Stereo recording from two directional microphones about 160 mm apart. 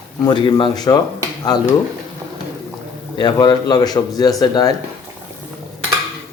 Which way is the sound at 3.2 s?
25° left (ahead or behind).